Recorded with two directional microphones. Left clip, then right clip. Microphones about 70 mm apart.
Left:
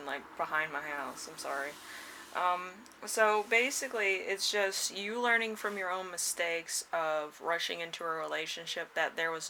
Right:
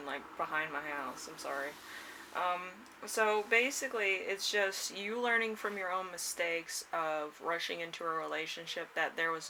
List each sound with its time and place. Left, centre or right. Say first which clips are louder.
0.0 s speech: left 2 dB; left